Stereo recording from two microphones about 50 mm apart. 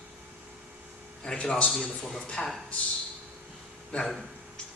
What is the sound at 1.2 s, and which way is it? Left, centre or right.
A man's voice, centre.